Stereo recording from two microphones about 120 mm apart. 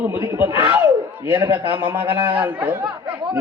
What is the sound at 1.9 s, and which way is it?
Speech, 10° right (ahead or behind).